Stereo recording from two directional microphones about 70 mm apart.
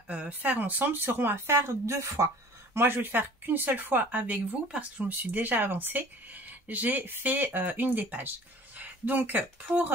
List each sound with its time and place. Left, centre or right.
0.1 s speech: right
2.8 s speech: right